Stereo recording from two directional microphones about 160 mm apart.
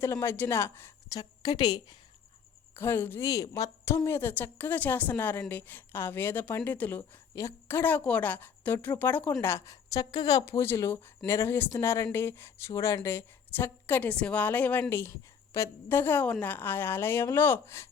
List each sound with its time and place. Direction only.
0.0 s a woman's voice: 15° left (ahead or behind)
2.7 s a woman's voice: 15° left (ahead or behind)